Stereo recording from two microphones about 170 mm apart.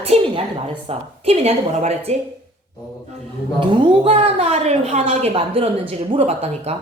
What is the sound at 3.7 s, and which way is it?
A woman's voice, 30° right (ahead or behind).